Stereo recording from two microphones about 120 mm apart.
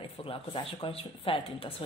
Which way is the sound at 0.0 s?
50° left (ahead or behind).